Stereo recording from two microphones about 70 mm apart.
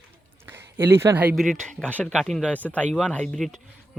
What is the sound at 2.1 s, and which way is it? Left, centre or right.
Speech, centre.